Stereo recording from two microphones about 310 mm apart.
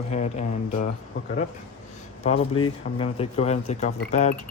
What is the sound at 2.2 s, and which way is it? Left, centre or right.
Speech, centre.